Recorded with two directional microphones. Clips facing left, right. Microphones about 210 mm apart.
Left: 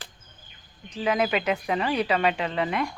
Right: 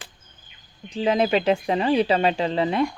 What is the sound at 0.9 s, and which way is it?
Speech, 30° right (ahead or behind).